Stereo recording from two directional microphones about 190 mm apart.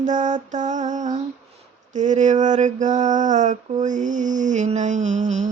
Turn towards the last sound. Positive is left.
turn(degrees=-40)  # may be behind; listen again after turning